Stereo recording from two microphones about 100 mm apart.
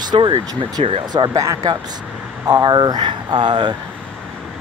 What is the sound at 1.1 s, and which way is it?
Speech, 40° right (ahead or behind).